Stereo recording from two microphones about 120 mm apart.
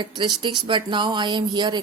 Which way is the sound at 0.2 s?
40° right (ahead or behind).